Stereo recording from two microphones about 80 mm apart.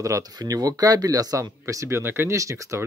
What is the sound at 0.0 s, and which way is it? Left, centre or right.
Speech, right.